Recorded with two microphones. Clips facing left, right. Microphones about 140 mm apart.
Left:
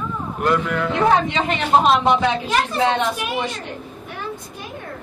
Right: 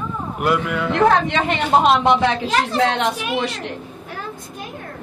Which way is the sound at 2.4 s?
90° right.